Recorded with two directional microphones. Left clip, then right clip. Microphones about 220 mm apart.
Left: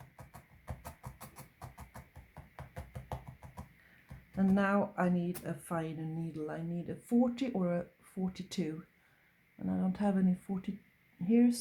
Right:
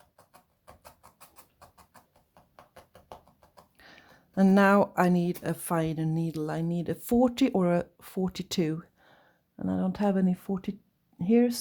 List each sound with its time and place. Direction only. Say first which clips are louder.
0.7 s music: left 3 dB; 5° left (ahead or behind)
4.4 s speech: right 10 dB; 45° right (ahead or behind)